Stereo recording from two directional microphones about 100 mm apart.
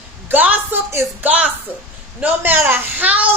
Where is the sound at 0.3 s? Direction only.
15° right (ahead or behind).